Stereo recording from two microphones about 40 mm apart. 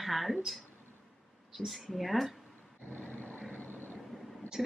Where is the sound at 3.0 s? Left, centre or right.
Left.